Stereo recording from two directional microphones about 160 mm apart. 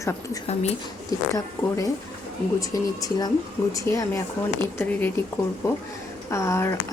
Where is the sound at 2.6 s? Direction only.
20° left (ahead or behind).